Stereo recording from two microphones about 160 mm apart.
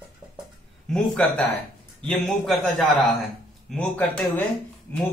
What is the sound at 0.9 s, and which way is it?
A man's voice, 5° left (ahead or behind).